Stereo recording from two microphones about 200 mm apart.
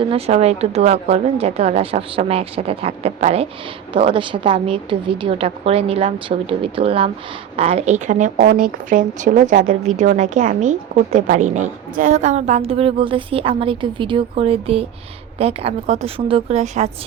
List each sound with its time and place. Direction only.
0.0 s a woman's voice: 30° right (ahead or behind)